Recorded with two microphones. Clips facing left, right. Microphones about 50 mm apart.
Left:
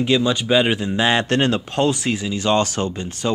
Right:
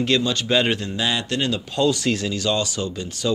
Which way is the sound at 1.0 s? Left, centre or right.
Left.